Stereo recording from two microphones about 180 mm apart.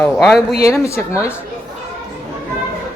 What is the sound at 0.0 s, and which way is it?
Speech, centre (ahead or behind).